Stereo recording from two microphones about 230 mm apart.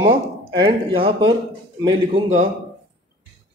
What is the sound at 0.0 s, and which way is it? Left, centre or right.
Speech, right.